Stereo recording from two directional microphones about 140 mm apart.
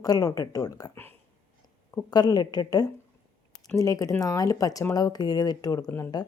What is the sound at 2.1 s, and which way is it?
A woman's voice, 30° left (ahead or behind).